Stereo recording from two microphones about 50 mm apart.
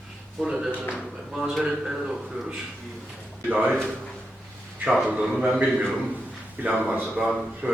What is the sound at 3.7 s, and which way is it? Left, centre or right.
Speech, centre.